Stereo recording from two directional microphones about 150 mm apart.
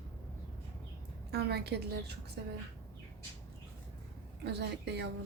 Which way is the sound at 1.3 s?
90° right.